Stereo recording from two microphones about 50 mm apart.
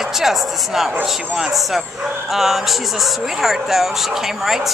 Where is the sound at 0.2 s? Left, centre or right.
Centre.